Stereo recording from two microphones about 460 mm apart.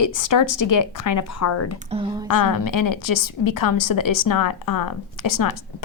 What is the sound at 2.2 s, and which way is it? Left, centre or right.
A woman's voice, left.